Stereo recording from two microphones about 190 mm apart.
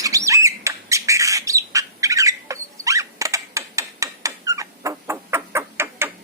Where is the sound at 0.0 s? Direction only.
15° right (ahead or behind).